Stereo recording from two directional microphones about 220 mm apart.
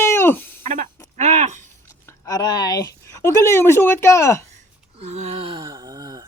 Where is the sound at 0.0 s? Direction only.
10° left (ahead or behind).